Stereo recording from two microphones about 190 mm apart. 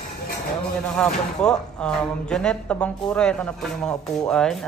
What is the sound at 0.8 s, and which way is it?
Speech, 5° left (ahead or behind).